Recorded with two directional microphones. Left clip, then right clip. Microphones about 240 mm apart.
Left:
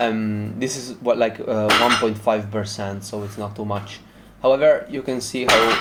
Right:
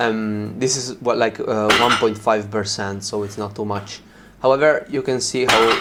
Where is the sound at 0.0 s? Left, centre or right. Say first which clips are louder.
Right 2 dB; centre.